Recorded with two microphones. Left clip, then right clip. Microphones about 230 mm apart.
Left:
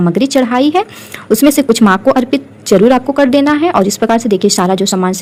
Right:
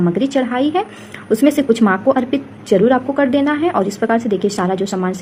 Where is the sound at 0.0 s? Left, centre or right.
Left.